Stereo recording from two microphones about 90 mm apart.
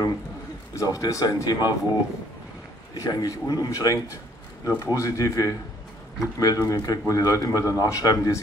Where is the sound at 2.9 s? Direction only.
45° left (ahead or behind).